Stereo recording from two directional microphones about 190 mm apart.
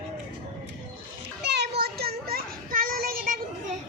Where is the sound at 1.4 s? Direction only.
60° right (ahead or behind).